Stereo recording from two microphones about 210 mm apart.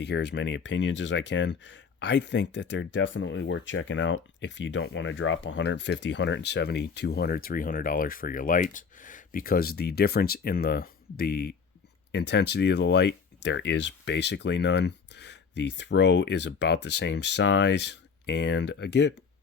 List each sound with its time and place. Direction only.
0.0 s speech: 55° left (ahead or behind)